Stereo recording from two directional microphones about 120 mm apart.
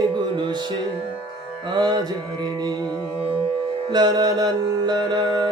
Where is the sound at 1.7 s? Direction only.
35° right (ahead or behind).